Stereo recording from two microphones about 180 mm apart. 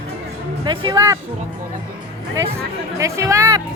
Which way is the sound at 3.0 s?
15° right (ahead or behind).